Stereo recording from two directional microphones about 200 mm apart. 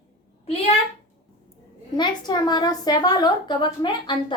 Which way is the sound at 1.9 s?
20° left (ahead or behind).